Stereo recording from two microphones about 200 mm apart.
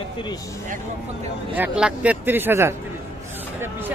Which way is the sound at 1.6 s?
5° right (ahead or behind).